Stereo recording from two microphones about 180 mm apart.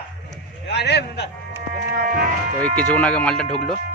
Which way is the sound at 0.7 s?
70° left (ahead or behind).